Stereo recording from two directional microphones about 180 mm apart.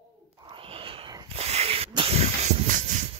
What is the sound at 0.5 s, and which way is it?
Snake, 30° right (ahead or behind).